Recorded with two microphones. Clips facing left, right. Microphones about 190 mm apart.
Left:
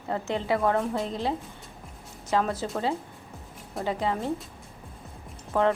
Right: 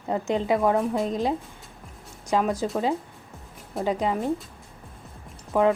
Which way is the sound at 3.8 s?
15° right (ahead or behind).